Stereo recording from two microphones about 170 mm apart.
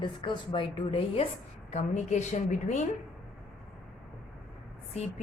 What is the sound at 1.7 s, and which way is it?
A woman's voice, 45° left (ahead or behind).